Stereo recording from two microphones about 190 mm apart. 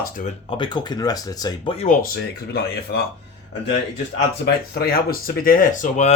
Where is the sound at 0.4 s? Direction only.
25° left (ahead or behind); by 3.0 s 55° left (ahead or behind).